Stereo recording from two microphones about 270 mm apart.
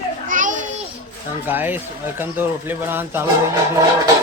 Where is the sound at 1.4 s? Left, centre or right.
Centre.